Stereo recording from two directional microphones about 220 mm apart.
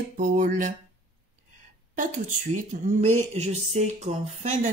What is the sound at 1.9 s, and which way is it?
Speech, 35° right (ahead or behind).